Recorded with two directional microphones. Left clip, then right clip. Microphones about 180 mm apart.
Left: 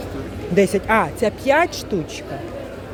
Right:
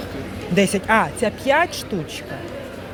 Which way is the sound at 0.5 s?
15° left (ahead or behind).